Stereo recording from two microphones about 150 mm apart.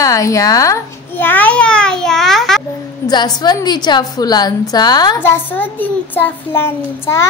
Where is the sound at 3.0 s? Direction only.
30° left (ahead or behind).